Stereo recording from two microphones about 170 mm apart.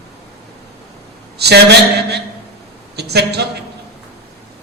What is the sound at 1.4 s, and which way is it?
A man's voice, 75° right (ahead or behind).